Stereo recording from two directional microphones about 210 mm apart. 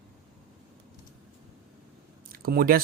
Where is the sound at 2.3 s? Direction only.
45° right (ahead or behind).